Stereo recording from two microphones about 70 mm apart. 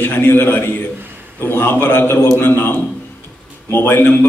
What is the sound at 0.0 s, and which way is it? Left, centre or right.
A man's voice, left.